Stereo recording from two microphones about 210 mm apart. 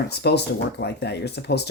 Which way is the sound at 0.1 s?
50° left (ahead or behind).